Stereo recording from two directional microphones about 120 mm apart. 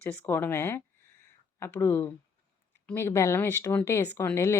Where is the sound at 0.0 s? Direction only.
15° left (ahead or behind).